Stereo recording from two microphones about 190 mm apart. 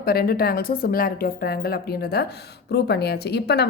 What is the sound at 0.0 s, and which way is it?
A woman's voice, 55° left (ahead or behind).